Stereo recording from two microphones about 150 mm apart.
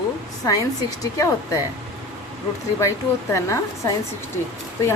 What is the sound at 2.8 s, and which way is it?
Speech, 20° left (ahead or behind).